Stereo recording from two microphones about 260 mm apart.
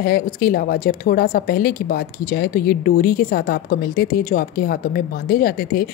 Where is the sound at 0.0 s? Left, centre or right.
Left.